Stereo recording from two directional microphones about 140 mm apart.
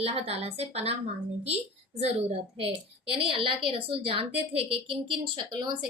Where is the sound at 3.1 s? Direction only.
40° right (ahead or behind).